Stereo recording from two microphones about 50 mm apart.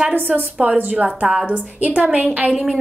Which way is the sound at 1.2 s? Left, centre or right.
Centre.